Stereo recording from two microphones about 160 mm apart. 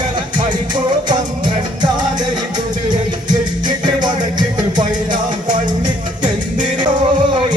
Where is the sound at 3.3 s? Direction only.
25° right (ahead or behind).